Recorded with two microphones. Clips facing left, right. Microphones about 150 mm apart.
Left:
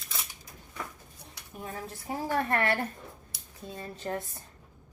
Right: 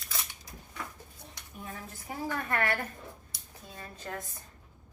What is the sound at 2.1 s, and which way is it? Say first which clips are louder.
Speech: left 5 dB; 30° left (ahead or behind).